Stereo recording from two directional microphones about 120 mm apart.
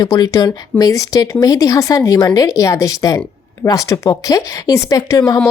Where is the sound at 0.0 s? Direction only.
30° left (ahead or behind).